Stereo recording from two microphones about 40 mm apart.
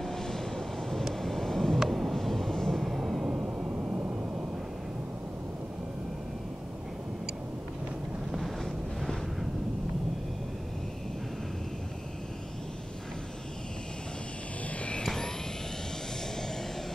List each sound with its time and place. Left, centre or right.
0.0 s vehicle: centre
1.8 s vehicle: centre
2.8 s vehicle: centre
3.3 s vehicle: right